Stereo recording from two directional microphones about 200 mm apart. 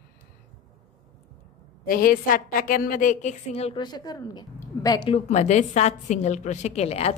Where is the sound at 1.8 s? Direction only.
45° left (ahead or behind); by 5.1 s 20° left (ahead or behind).